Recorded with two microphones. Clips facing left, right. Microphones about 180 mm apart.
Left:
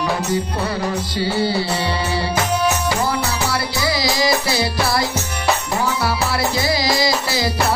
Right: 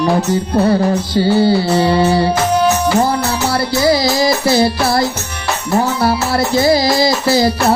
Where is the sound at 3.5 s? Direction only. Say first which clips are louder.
Right 8 dB; 50° right (ahead or behind).